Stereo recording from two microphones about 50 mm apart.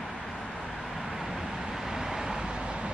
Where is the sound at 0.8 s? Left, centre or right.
Centre.